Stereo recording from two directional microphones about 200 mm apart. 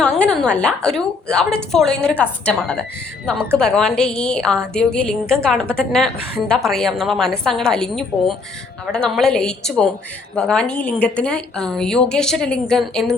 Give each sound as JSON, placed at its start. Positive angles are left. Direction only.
{"t": 0.0, "sound": "a woman's voice", "side_deg": 5}